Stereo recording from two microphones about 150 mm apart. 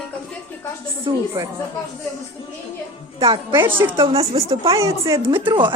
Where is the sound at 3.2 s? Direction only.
35° right (ahead or behind).